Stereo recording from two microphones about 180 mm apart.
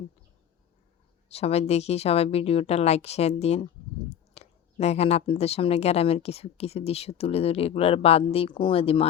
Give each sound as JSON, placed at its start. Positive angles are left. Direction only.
{"t": 1.3, "sound": "speech", "side_deg": 35}